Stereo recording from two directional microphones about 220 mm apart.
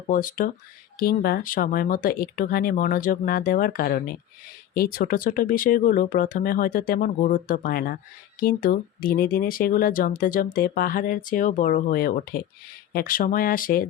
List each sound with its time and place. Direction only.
0.1 s speech: 40° left (ahead or behind)